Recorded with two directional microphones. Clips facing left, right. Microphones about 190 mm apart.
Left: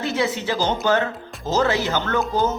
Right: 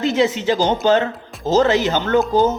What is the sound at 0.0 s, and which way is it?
Speech, 20° right (ahead or behind).